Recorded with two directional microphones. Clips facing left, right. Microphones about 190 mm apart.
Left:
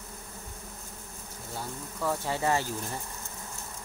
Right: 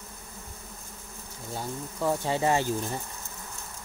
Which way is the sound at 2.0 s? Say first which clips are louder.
Right 3 dB; 20° right (ahead or behind).